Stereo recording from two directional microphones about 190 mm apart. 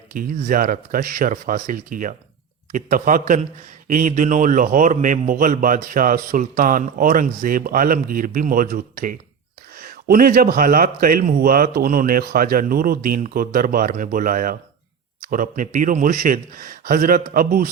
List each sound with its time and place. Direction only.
0.1 s a man's voice: 50° right (ahead or behind)